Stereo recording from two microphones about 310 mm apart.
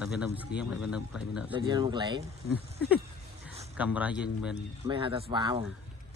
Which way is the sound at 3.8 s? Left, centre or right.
Centre.